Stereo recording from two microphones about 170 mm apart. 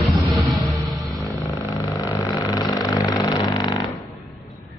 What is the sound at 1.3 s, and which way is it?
Vehicle, 15° left (ahead or behind).